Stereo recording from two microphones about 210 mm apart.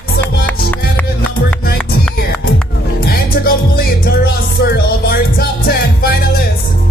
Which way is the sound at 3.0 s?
45° left (ahead or behind).